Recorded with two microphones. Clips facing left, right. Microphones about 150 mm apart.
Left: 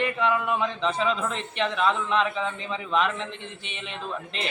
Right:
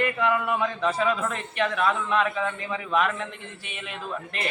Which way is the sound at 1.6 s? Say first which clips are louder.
Even; 5° right (ahead or behind).